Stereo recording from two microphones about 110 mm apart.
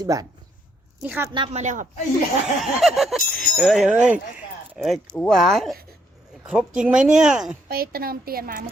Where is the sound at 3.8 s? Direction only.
10° right (ahead or behind).